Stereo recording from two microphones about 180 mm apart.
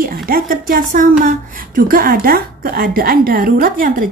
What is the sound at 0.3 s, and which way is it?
A woman's voice, 50° right (ahead or behind).